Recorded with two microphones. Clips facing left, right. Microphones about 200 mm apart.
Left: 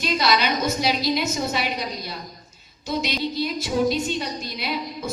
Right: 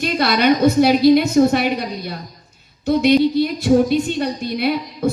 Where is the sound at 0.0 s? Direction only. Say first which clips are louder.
Right 5 dB; 55° right (ahead or behind).